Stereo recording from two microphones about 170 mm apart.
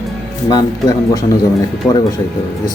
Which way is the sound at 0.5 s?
20° left (ahead or behind).